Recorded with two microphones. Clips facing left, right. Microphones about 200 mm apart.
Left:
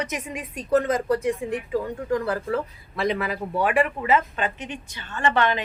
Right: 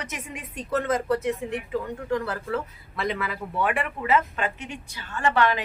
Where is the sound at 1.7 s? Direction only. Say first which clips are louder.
Left 2 dB; 35° left (ahead or behind).